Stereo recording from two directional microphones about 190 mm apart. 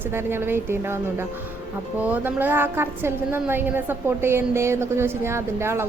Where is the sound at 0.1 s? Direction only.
10° right (ahead or behind).